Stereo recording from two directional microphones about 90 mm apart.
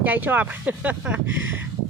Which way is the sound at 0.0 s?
20° right (ahead or behind).